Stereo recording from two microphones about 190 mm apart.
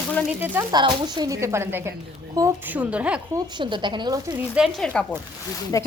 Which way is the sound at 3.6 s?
25° right (ahead or behind).